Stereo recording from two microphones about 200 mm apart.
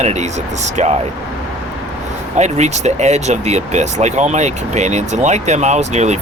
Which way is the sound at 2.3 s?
35° right (ahead or behind).